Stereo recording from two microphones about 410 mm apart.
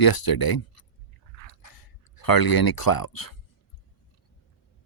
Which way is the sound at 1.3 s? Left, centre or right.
Left.